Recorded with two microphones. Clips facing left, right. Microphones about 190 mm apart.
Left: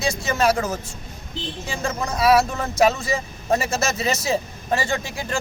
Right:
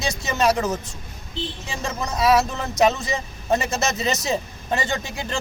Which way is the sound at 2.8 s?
Centre (ahead or behind).